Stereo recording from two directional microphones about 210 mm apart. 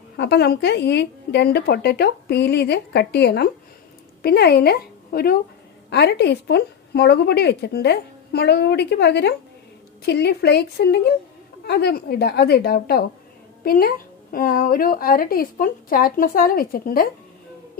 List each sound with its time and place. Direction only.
0.2 s a woman's voice: 50° left (ahead or behind)